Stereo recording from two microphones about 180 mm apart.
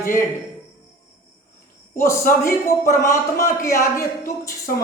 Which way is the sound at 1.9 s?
15° left (ahead or behind).